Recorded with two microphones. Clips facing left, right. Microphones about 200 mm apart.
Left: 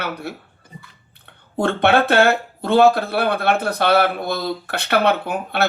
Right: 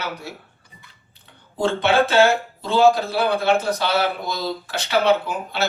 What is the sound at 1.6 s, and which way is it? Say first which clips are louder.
Speech: left 2 dB; 60° left (ahead or behind).